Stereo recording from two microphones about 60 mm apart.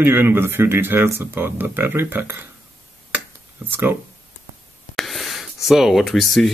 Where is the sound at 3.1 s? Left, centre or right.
Right.